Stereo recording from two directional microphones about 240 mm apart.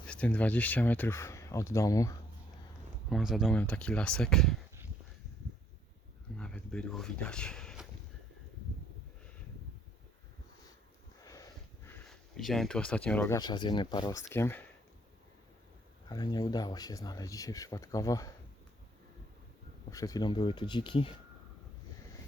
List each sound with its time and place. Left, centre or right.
0.0 s speech: centre
3.1 s speech: centre
6.3 s a sound: centre
11.9 s speech: centre
16.0 s speech: centre
19.9 s speech: centre